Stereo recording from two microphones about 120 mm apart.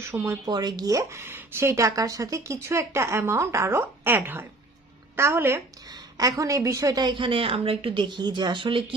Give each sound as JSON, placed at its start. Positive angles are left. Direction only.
{"t": 0.0, "sound": "speech", "side_deg": -20}
{"t": 0.5, "sound": "a woman's voice", "side_deg": -35}